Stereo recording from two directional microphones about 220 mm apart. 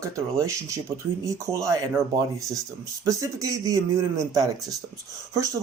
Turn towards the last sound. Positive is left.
turn(degrees=-15)  # may be behind; listen again after turning